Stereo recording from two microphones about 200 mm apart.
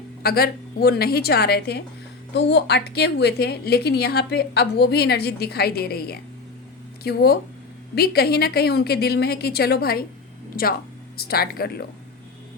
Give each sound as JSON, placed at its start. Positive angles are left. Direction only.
{"t": 0.2, "sound": "a woman's voice", "side_deg": 50}